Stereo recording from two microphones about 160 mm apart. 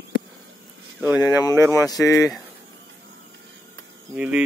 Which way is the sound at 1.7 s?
20° left (ahead or behind).